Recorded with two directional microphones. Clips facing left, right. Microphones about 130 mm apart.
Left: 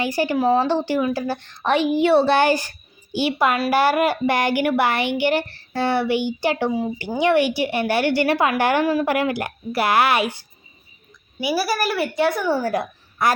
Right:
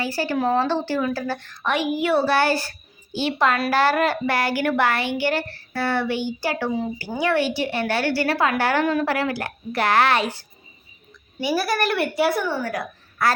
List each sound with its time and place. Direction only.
0.0 s a woman's voice: 15° left (ahead or behind)
1.6 s a woman's voice: 30° left (ahead or behind)
8.8 s a woman's voice: 5° left (ahead or behind)
9.1 s a woman's voice: 15° left (ahead or behind)
11.3 s a woman's voice: 10° left (ahead or behind)
12.5 s a woman's voice: 30° left (ahead or behind)